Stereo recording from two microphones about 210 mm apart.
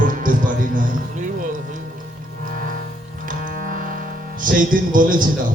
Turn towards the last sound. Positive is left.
turn(degrees=-40)  # may be behind; listen again after turning